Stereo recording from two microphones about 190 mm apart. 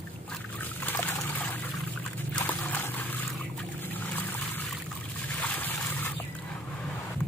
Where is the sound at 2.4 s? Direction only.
10° left (ahead or behind).